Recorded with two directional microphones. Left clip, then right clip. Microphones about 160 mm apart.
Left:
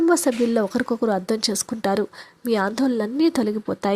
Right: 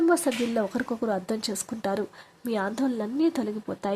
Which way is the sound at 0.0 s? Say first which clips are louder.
Left 5 dB; 25° left (ahead or behind).